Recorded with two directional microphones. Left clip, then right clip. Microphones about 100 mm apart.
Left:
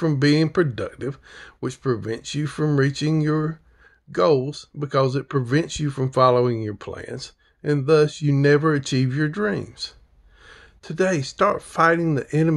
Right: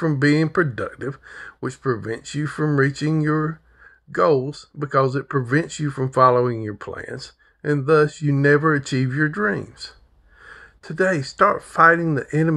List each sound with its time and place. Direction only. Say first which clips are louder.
0.0 s speech: right 1 dB; 20° left (ahead or behind)